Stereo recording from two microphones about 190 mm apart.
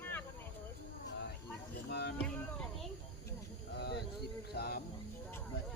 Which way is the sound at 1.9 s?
60° left (ahead or behind).